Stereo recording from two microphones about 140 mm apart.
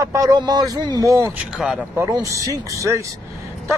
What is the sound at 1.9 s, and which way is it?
Speech, 25° right (ahead or behind).